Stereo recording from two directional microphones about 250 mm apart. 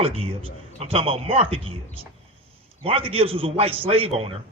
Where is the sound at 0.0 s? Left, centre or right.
Right.